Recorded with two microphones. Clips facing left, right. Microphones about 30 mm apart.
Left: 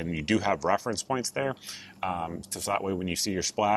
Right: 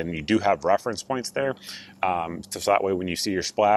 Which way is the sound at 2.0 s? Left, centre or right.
Right.